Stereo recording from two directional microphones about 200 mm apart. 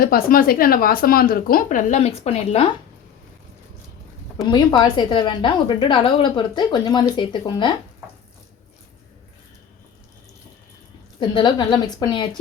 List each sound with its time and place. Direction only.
0.0 s a woman's voice: 45° left (ahead or behind); by 2.6 s 30° left (ahead or behind)
4.4 s a woman's voice: 20° left (ahead or behind)
11.2 s a woman's voice: 25° left (ahead or behind)